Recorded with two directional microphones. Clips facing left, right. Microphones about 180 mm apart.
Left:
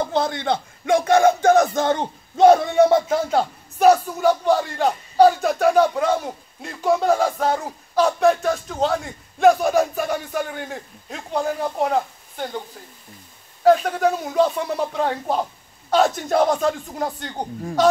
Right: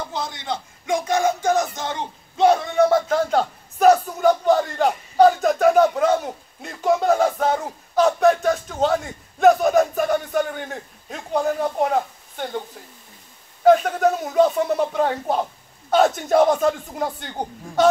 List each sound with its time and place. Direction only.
0.1 s speech: 60° left (ahead or behind)
2.7 s speech: 20° left (ahead or behind)
3.1 s a man's voice: 5° left (ahead or behind)